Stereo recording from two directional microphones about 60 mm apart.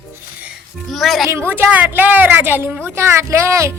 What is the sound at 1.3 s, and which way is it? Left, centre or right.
Speech, right.